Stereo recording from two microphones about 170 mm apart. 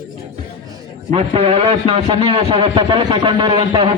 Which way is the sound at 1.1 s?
35° right (ahead or behind).